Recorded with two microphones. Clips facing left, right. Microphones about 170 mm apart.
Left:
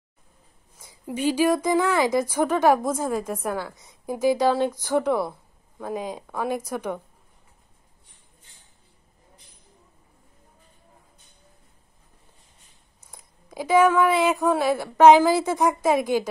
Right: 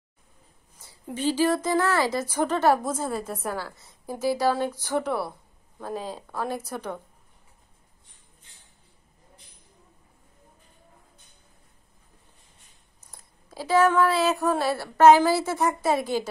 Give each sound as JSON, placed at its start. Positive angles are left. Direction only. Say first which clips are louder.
{"t": 0.8, "sound": "speech", "louder": "left 2 dB", "side_deg": 10}
{"t": 13.1, "sound": "speech", "louder": "left 4 dB", "side_deg": 15}